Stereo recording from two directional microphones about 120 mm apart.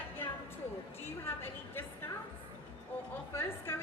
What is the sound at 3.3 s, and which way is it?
Speech, 20° left (ahead or behind).